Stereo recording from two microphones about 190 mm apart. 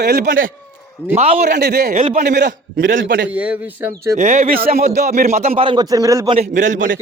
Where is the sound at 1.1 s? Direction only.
35° right (ahead or behind).